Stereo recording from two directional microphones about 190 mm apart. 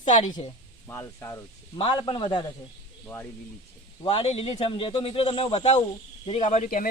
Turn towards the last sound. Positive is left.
turn(degrees=40)  # may be behind; listen again after turning